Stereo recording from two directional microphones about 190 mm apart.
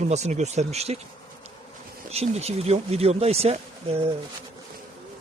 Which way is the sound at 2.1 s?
35° right (ahead or behind).